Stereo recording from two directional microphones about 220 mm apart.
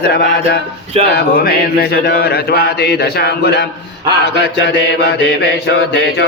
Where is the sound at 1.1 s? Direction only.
45° left (ahead or behind).